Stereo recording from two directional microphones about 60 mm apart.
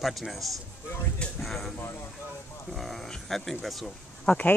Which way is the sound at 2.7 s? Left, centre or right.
Centre.